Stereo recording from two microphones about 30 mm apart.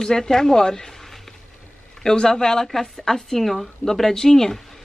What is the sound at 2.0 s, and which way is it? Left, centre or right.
Speech, left.